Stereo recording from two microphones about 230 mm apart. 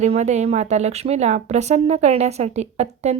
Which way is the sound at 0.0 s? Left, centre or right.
Right.